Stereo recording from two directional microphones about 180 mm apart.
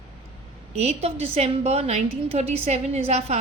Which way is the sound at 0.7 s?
35° right (ahead or behind).